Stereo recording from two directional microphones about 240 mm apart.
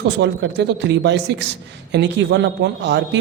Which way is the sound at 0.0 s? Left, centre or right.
Right.